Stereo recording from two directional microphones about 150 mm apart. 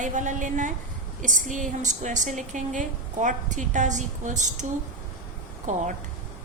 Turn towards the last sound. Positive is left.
turn(degrees=-55)  # may be behind; listen again after turning